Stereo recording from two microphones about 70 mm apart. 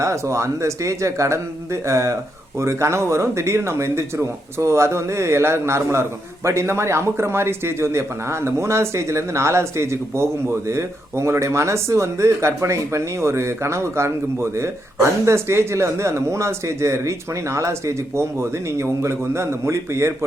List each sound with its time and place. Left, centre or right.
0.0 s speech: right